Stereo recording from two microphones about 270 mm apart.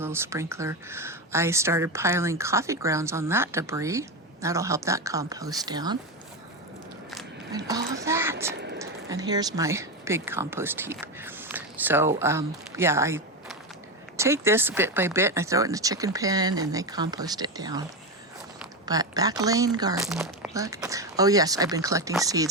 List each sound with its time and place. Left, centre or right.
0.0 s speech: centre
7.5 s speech: centre
18.9 s speech: centre
20.1 s speech: centre